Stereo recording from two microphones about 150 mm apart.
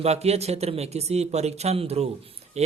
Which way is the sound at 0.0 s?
45° right (ahead or behind).